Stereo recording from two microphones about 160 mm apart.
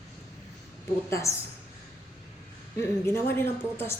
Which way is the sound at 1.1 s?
20° left (ahead or behind).